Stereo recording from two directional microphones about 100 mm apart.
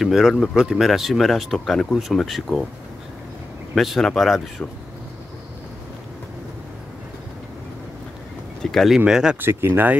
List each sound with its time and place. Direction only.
0.0 s speech: centre (ahead or behind)
3.7 s speech: centre (ahead or behind)
8.7 s speech: centre (ahead or behind)
9.4 s speech: 20° right (ahead or behind)